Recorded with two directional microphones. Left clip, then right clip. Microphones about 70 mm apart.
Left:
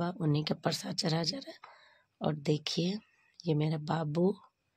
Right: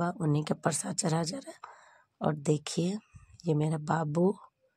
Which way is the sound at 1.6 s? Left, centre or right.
Right.